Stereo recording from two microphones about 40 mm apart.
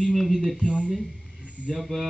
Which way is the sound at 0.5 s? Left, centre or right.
Left.